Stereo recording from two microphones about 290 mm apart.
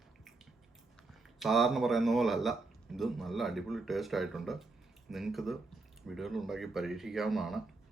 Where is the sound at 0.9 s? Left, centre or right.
Centre.